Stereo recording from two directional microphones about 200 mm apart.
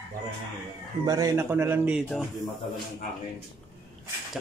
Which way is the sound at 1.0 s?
15° right (ahead or behind).